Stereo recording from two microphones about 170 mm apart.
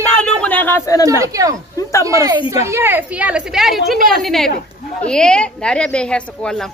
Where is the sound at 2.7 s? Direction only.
10° right (ahead or behind).